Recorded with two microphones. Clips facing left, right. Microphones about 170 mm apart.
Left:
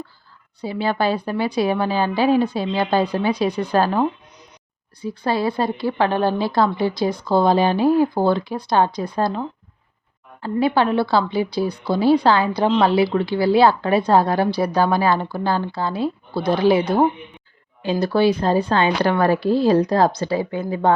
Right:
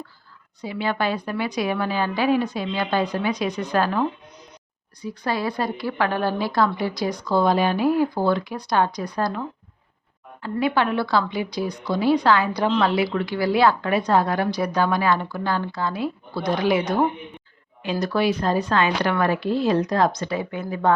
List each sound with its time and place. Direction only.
0.6 s speech: 30° left (ahead or behind)
5.0 s speech: 30° left (ahead or behind)